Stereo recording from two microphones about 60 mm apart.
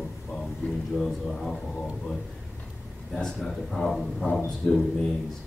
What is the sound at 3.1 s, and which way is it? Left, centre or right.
Speech, centre.